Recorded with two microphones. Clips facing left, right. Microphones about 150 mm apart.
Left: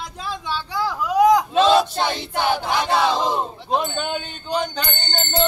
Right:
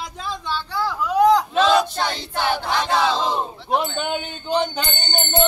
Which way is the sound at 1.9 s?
15° left (ahead or behind).